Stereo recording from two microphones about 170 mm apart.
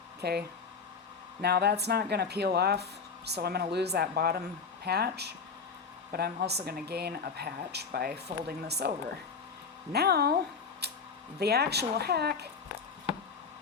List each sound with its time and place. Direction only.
0.2 s speech: 70° right (ahead or behind)
9.9 s speech: 70° right (ahead or behind)
11.3 s speech: 70° right (ahead or behind)